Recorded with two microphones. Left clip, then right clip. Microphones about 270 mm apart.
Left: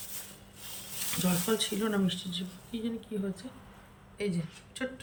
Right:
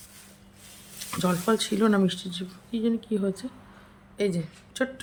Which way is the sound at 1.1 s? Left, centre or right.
Centre.